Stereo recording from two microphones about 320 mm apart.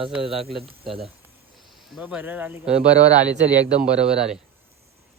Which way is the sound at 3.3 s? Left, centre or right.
Right.